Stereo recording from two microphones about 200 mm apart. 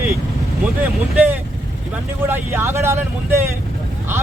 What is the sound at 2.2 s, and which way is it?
Speech, 10° right (ahead or behind).